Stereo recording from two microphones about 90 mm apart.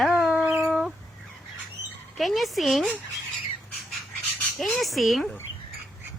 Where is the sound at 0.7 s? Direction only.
5° right (ahead or behind).